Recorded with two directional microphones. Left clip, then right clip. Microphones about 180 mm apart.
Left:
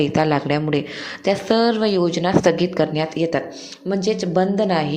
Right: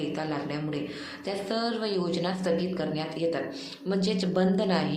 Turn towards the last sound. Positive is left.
turn(degrees=40)  # may be behind; listen again after turning